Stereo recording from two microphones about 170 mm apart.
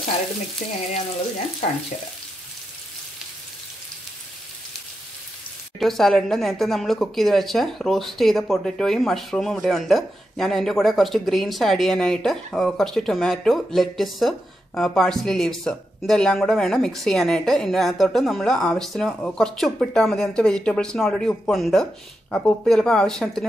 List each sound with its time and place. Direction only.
0.6 s frying: 50° left (ahead or behind)
5.8 s speech: centre (ahead or behind)